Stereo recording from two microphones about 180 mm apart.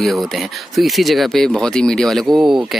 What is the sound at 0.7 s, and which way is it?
Speech, centre (ahead or behind).